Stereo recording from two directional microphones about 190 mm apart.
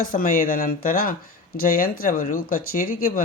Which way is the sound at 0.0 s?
45° left (ahead or behind).